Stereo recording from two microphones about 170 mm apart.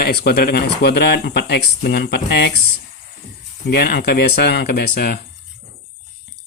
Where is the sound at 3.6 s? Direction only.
70° left (ahead or behind).